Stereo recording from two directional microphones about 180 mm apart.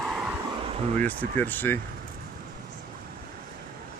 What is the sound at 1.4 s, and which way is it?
Speech, 10° left (ahead or behind).